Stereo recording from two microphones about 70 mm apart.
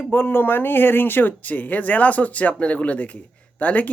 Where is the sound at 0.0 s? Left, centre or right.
Left.